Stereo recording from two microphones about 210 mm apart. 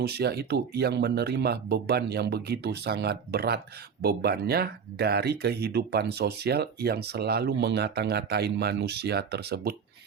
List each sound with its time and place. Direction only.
0.0 s speech: 50° right (ahead or behind)